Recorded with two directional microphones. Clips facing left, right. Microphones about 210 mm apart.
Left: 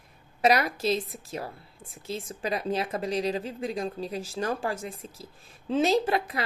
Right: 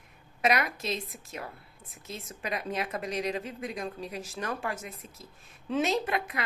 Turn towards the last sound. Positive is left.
turn(degrees=30)  # may be behind; listen again after turning